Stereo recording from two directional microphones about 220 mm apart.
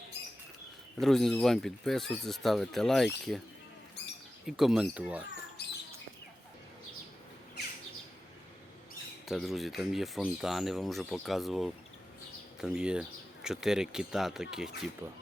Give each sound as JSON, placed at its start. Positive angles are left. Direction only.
{"t": 0.9, "sound": "speech", "side_deg": 0}
{"t": 4.4, "sound": "speech", "side_deg": 0}
{"t": 5.6, "sound": "chirp", "side_deg": 50}
{"t": 9.2, "sound": "speech", "side_deg": 0}